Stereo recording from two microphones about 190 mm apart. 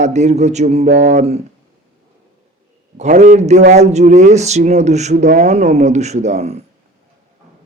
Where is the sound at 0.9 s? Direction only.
65° right (ahead or behind).